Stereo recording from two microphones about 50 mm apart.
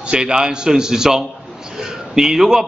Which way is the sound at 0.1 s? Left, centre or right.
Centre.